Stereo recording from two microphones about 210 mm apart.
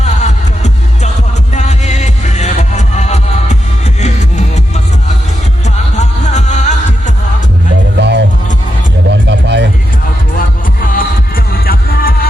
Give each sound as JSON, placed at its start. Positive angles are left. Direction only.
{"t": 0.0, "sound": "music", "side_deg": 35}
{"t": 7.9, "sound": "music", "side_deg": -55}
{"t": 10.8, "sound": "music", "side_deg": 40}